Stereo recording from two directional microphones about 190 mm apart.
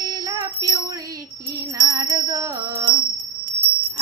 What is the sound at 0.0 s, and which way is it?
Music, 20° right (ahead or behind).